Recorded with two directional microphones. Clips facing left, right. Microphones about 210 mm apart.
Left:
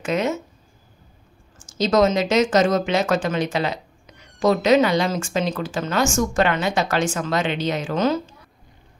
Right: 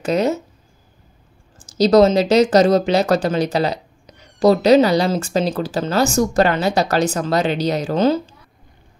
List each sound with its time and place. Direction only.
0.0 s speech: 35° right (ahead or behind)
1.6 s speech: 35° right (ahead or behind)